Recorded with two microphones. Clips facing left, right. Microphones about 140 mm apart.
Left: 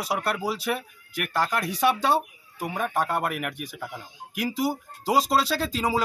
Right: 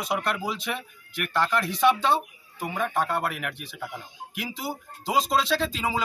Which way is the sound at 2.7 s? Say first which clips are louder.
Even; 10° left (ahead or behind).